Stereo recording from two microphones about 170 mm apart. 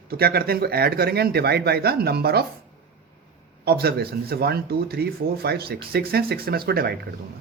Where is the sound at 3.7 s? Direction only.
70° right (ahead or behind).